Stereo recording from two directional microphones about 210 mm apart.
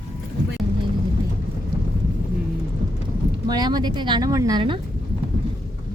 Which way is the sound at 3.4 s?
20° right (ahead or behind).